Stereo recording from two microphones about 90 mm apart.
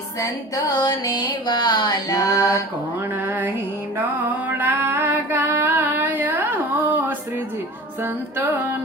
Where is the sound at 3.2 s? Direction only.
25° right (ahead or behind).